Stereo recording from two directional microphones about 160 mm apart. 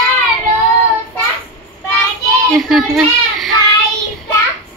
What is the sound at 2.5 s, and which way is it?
Speech, centre (ahead or behind).